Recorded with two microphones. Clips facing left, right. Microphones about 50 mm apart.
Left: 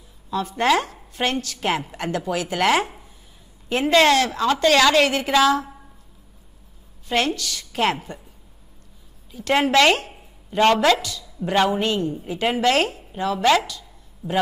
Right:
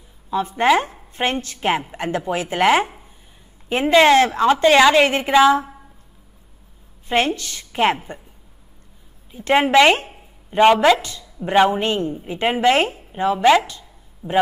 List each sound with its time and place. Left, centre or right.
0.3 s a woman's voice: right
7.1 s a woman's voice: right
9.3 s a woman's voice: right
11.0 s a woman's voice: right
12.1 s a woman's voice: centre
12.4 s speech: right